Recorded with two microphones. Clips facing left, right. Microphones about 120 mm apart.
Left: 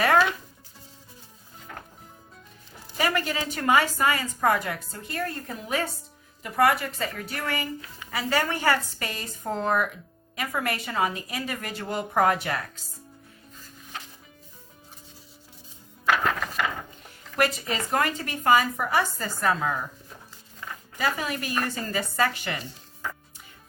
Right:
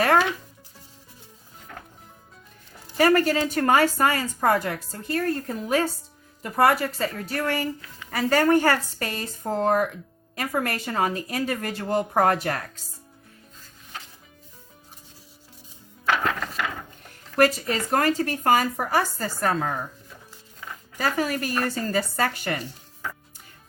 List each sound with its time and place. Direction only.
3.0 s a woman's voice: 45° right (ahead or behind)
16.0 s music: 5° left (ahead or behind)
17.3 s a woman's voice: 40° right (ahead or behind)
21.0 s a woman's voice: 40° right (ahead or behind)